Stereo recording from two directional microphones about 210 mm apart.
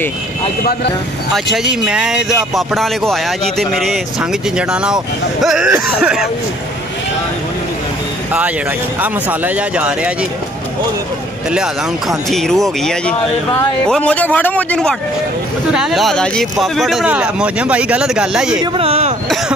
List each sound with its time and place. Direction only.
1.3 s speech: centre (ahead or behind)
8.3 s speech: 5° right (ahead or behind)
12.3 s speech: centre (ahead or behind)
18.6 s speech: 25° right (ahead or behind)